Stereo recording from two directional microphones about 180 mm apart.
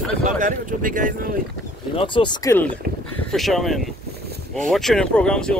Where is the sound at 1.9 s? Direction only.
30° left (ahead or behind).